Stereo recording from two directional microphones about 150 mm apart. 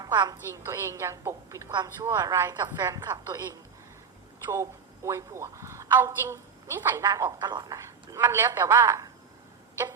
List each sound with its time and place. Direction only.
0.0 s a woman's voice: 30° right (ahead or behind)